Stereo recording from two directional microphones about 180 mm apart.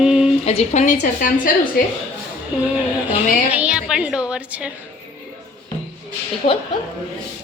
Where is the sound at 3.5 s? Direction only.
5° right (ahead or behind).